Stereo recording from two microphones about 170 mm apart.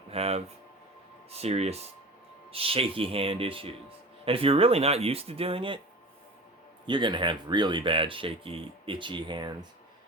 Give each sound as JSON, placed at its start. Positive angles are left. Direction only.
{"t": 0.1, "sound": "speech", "side_deg": -35}
{"t": 6.8, "sound": "speech", "side_deg": -30}